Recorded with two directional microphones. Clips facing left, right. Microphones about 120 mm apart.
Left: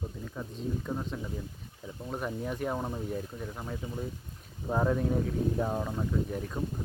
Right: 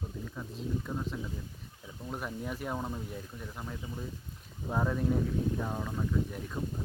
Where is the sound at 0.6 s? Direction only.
Centre (ahead or behind).